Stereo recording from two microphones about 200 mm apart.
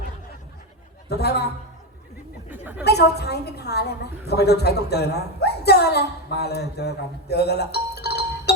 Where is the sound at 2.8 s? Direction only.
55° left (ahead or behind).